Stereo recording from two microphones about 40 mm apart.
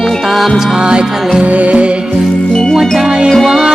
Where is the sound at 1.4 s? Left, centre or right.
Right.